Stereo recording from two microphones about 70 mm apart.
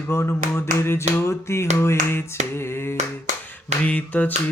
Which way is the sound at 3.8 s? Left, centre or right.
Left.